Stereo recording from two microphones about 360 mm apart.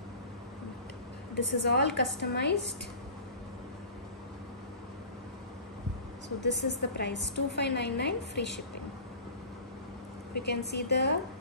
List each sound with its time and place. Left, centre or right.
1.3 s a woman's voice: left
6.7 s a woman's voice: left
10.3 s a woman's voice: left